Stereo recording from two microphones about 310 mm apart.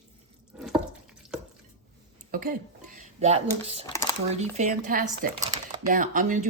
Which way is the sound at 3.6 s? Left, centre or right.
Centre.